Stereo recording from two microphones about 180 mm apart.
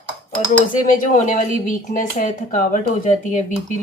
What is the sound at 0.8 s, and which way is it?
Speech, 45° left (ahead or behind).